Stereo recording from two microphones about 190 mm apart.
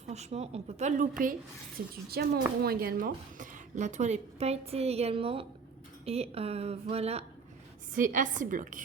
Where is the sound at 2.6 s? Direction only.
50° right (ahead or behind); by 7.2 s 35° right (ahead or behind).